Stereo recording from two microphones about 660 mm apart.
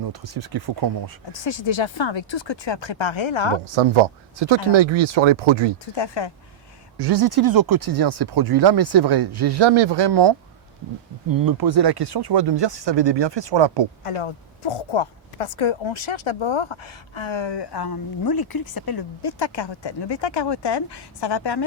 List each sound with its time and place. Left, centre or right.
0.1 s speech: right
1.3 s a woman's voice: left
3.8 s speech: right
5.9 s a woman's voice: left
7.0 s speech: right
11.3 s speech: right
14.0 s a woman's voice: left